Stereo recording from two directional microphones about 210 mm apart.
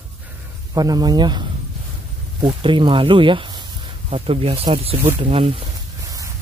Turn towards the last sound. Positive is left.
turn(degrees=-15)  # may be behind; listen again after turning